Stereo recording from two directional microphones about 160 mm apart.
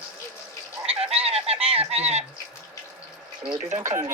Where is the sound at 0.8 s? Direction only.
40° right (ahead or behind).